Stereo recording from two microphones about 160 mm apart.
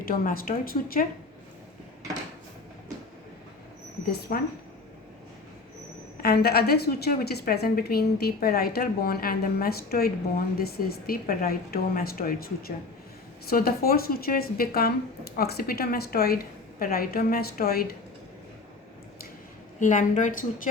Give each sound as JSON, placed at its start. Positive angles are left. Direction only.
{"t": 0.0, "sound": "a woman's voice", "side_deg": 65}
{"t": 4.3, "sound": "a woman's voice", "side_deg": 65}
{"t": 6.2, "sound": "a woman's voice", "side_deg": 75}
{"t": 19.8, "sound": "a woman's voice", "side_deg": 50}